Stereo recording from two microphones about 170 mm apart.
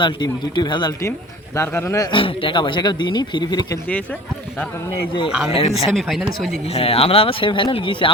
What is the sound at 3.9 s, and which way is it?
Speech, 10° left (ahead or behind).